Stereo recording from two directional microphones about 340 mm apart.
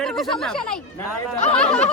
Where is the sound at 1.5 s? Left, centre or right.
Centre.